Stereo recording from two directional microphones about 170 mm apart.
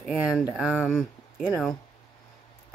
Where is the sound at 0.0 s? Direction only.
5° right (ahead or behind).